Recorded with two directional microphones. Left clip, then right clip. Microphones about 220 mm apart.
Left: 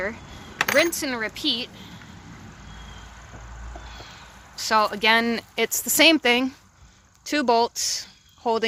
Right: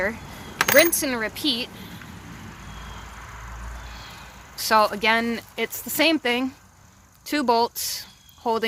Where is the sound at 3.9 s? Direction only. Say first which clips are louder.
Right 2 dB; centre (ahead or behind).